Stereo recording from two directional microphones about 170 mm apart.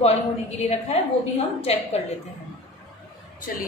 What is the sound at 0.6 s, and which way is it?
A woman's voice, 40° left (ahead or behind).